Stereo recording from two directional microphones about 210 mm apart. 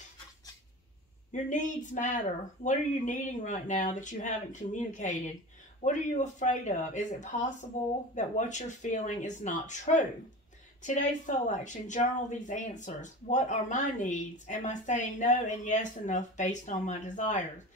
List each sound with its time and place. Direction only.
1.3 s a woman's voice: 35° left (ahead or behind)